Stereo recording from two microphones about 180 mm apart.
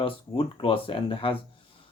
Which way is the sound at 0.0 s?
30° left (ahead or behind).